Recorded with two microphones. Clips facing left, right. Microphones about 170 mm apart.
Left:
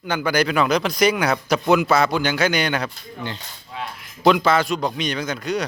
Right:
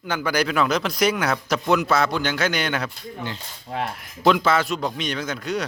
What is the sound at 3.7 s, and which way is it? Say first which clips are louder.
Speech: right 5 dB; 55° right (ahead or behind).